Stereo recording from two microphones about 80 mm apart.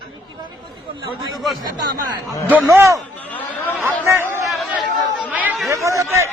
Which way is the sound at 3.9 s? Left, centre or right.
Right.